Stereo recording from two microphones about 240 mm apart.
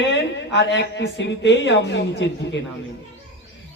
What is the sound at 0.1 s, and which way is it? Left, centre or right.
Speech, left.